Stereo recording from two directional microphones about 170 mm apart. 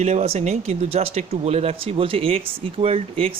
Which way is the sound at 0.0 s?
40° right (ahead or behind).